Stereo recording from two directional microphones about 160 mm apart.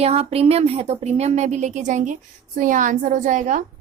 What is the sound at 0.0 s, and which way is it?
A woman's voice, 40° right (ahead or behind).